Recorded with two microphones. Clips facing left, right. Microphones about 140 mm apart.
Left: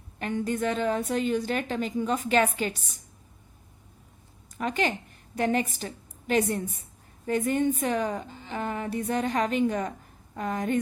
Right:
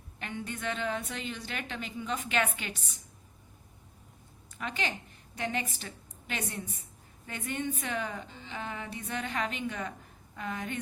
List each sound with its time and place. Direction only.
0.2 s a woman's voice: 40° left (ahead or behind)
4.5 s a woman's voice: 45° left (ahead or behind)